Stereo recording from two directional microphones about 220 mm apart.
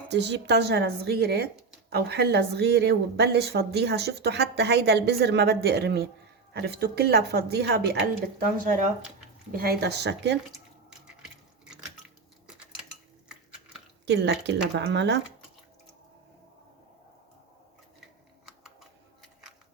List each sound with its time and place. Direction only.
0.1 s speech: 50° right (ahead or behind)
10.8 s a sound: 5° right (ahead or behind)
14.0 s speech: 50° right (ahead or behind)
18.4 s typing: centre (ahead or behind)